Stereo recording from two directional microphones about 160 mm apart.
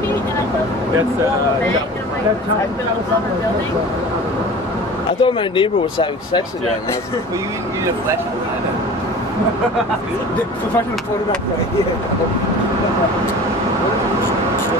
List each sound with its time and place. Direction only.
5.2 s speech: 30° left (ahead or behind)